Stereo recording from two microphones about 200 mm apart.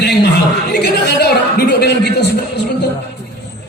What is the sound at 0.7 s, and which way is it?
Speech, 55° left (ahead or behind).